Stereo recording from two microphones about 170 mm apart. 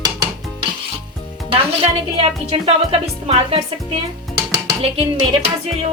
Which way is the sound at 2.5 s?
30° right (ahead or behind).